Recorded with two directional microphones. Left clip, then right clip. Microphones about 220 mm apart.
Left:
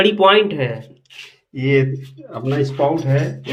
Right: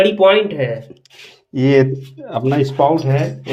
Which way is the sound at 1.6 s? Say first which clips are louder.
Right 4 dB; 50° right (ahead or behind).